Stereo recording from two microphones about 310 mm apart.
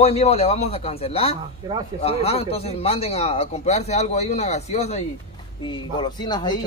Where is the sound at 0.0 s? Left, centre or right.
Centre.